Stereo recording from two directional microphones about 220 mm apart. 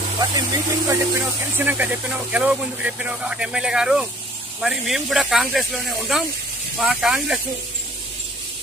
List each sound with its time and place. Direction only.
0.2 s speech: 15° right (ahead or behind)